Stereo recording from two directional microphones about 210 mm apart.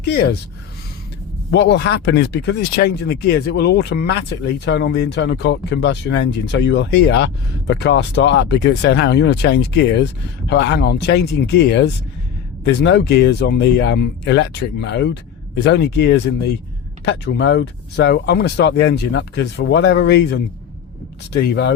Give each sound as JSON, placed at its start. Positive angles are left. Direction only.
{"t": 0.0, "sound": "speech", "side_deg": 50}
{"t": 1.5, "sound": "speech", "side_deg": 55}